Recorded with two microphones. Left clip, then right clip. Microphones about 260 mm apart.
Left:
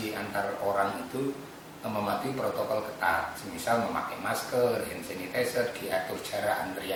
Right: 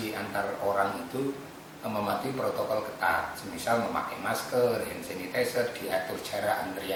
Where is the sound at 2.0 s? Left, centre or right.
Right.